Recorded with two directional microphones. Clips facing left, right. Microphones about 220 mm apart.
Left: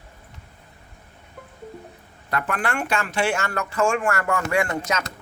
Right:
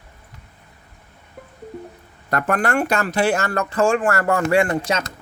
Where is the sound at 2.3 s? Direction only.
45° right (ahead or behind).